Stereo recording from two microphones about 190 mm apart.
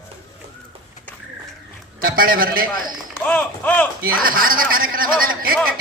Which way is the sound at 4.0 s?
50° right (ahead or behind).